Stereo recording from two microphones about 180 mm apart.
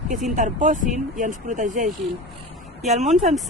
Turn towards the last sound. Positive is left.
turn(degrees=0)  # may be behind; listen again after turning